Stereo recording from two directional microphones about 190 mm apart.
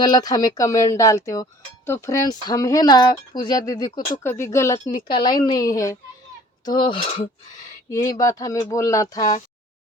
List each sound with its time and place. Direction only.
0.0 s speech: 20° left (ahead or behind)
4.9 s speech: 25° left (ahead or behind)